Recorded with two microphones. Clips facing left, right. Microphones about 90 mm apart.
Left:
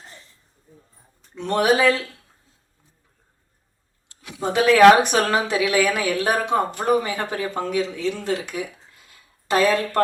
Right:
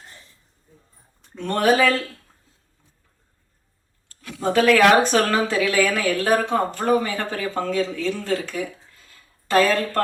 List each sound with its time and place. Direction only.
1.4 s a woman's voice: 15° left (ahead or behind)
4.1 s a woman's voice: 15° left (ahead or behind)